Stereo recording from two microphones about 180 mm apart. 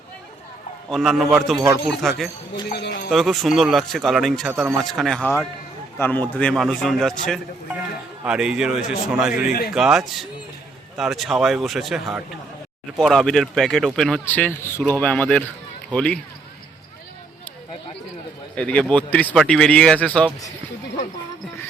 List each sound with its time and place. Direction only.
0.9 s speech: centre (ahead or behind)
2.6 s speech: 65° left (ahead or behind)
3.1 s speech: centre (ahead or behind)
9.5 s speech: 55° left (ahead or behind)
9.7 s speech: 5° right (ahead or behind)
18.5 s speech: 5° left (ahead or behind)